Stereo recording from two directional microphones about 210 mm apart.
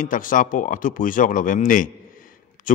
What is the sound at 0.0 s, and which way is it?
A man's voice, 40° left (ahead or behind).